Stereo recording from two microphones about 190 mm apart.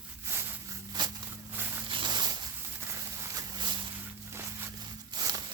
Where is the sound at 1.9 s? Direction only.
25° right (ahead or behind).